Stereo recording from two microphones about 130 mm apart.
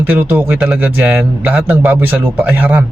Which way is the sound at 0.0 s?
15° right (ahead or behind).